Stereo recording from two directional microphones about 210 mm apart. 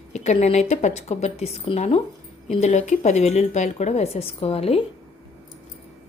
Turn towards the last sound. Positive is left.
turn(degrees=30)  # may be behind; listen again after turning